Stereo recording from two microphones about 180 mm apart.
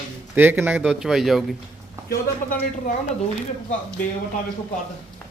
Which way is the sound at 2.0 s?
50° left (ahead or behind).